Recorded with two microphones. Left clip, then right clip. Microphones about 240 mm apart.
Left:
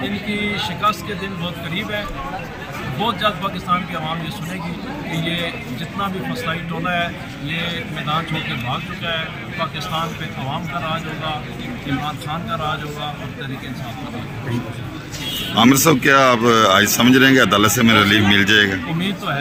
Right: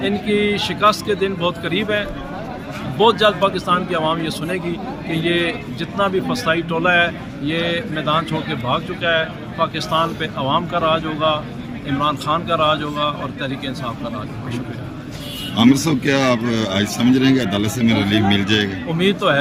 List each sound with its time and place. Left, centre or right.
0.0 s speech: right
5.2 s speech: right
15.5 s speech: centre
18.9 s speech: right